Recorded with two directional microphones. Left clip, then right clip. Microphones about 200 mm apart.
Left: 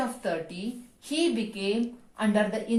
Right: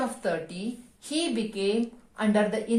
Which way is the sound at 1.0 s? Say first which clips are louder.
Left 2 dB; 40° right (ahead or behind).